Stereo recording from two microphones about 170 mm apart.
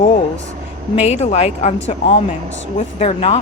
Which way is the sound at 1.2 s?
40° left (ahead or behind).